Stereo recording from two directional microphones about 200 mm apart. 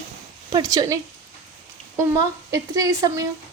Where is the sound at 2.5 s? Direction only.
15° right (ahead or behind).